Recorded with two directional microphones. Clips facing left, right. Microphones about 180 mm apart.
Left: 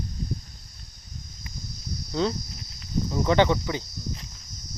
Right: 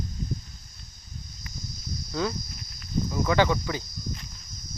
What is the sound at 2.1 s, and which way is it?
Speech, 25° left (ahead or behind).